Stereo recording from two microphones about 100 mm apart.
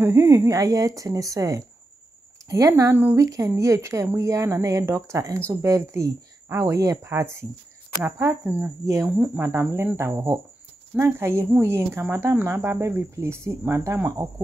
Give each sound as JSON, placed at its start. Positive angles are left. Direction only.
{"t": 0.0, "sound": "speech", "side_deg": -30}
{"t": 2.7, "sound": "speech", "side_deg": -20}
{"t": 3.2, "sound": "speech", "side_deg": -35}
{"t": 9.1, "sound": "speech", "side_deg": -15}
{"t": 9.4, "sound": "speech", "side_deg": -25}